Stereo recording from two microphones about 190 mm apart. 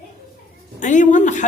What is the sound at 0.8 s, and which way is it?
Speech, 40° left (ahead or behind).